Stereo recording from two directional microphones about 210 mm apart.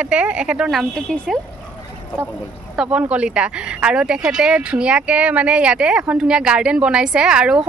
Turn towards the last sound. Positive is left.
turn(degrees=-5)  # may be behind; listen again after turning